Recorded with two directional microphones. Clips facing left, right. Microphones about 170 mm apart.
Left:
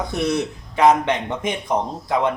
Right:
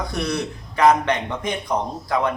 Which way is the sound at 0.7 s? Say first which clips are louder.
Left 1 dB; 20° left (ahead or behind).